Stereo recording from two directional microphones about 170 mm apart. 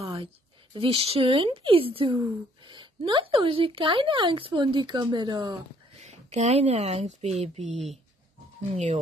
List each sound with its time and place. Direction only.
0.0 s a sound: 35° right (ahead or behind)
0.7 s speech: 35° right (ahead or behind)
5.9 s speech: 40° right (ahead or behind)
7.7 s speech: centre (ahead or behind)
8.7 s speech: 40° right (ahead or behind)